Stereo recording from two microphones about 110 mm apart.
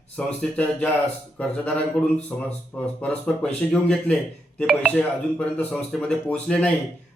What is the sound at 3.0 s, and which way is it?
A man's voice, 10° left (ahead or behind).